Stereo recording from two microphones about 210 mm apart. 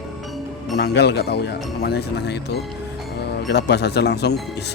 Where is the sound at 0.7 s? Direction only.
50° left (ahead or behind).